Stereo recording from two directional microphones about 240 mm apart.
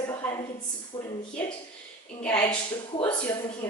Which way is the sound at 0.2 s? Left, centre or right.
Centre.